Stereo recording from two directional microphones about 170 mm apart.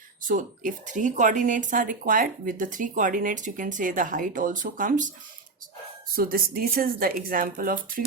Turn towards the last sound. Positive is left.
turn(degrees=-55)  # may be behind; listen again after turning